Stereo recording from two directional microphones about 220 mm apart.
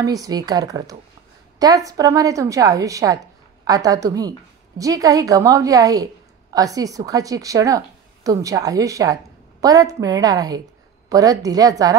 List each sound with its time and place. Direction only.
0.0 s a woman's voice: 15° right (ahead or behind)